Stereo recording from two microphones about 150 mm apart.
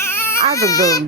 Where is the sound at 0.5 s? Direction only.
25° left (ahead or behind).